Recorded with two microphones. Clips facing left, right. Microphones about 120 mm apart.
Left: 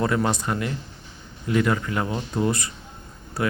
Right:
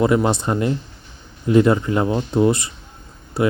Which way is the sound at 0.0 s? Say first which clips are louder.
Right 6 dB; 20° right (ahead or behind).